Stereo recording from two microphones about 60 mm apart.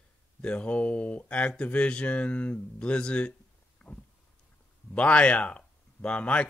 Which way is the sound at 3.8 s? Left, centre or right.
Centre.